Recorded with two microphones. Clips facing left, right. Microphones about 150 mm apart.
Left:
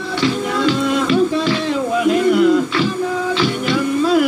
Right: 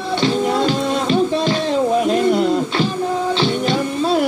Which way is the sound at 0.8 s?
30° right (ahead or behind).